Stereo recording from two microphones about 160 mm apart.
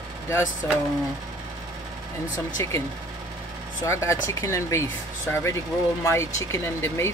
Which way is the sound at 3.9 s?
20° left (ahead or behind).